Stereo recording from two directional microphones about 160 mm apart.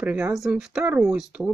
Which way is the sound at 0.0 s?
10° right (ahead or behind).